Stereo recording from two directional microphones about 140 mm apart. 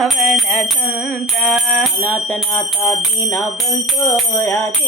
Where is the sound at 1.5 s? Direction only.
Centre (ahead or behind).